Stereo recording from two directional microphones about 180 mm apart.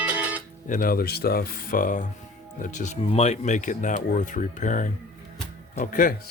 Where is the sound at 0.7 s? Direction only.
50° left (ahead or behind).